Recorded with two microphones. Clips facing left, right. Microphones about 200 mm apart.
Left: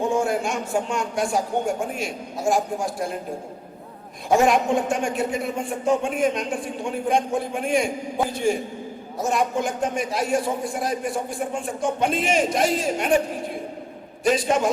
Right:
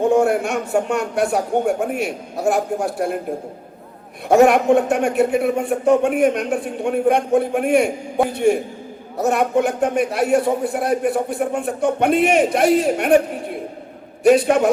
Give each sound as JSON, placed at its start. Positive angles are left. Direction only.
{"t": 0.0, "sound": "speech", "side_deg": -65}
{"t": 4.3, "sound": "speech", "side_deg": -65}
{"t": 14.3, "sound": "speech", "side_deg": -60}